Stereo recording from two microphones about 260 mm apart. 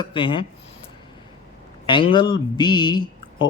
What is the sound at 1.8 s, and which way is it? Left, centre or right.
Speech, centre.